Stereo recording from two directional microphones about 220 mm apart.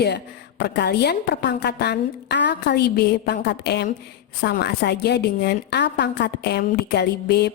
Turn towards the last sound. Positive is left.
turn(degrees=50)  # may be behind; listen again after turning